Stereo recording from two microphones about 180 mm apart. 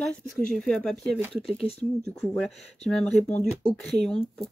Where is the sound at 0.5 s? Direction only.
5° left (ahead or behind).